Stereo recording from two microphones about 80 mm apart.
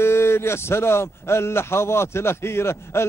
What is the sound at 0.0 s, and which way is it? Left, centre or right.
A man's voice, left.